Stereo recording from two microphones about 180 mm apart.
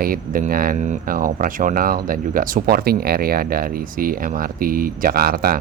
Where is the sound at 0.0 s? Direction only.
50° right (ahead or behind).